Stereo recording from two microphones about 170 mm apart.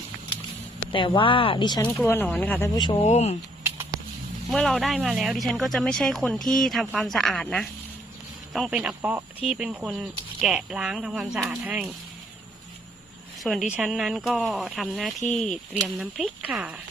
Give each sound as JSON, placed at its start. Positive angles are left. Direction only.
{"t": 0.9, "sound": "speech", "side_deg": 30}
{"t": 2.0, "sound": "speech", "side_deg": 10}
{"t": 3.0, "sound": "speech", "side_deg": 40}
{"t": 4.4, "sound": "speech", "side_deg": 0}
{"t": 13.4, "sound": "a woman's voice", "side_deg": 0}